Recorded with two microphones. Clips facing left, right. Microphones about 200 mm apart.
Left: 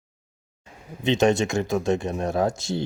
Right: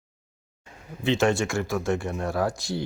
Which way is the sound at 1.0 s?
20° left (ahead or behind).